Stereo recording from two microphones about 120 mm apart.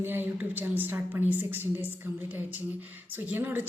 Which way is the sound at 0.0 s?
15° right (ahead or behind).